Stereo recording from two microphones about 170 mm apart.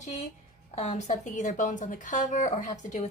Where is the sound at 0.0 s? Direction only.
40° left (ahead or behind).